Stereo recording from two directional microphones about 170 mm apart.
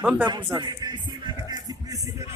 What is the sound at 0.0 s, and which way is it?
Speech, 10° right (ahead or behind).